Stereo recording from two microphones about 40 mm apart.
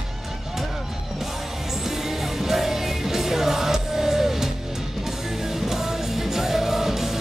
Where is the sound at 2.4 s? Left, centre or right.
Centre.